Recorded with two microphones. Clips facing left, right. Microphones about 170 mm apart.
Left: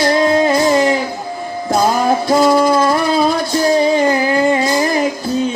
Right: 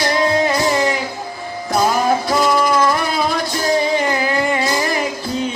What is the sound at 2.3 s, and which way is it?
Music, 25° left (ahead or behind).